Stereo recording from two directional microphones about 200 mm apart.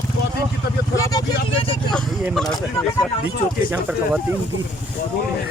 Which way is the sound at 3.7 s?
5° right (ahead or behind).